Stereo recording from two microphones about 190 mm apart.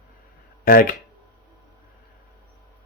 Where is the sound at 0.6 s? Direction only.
50° left (ahead or behind).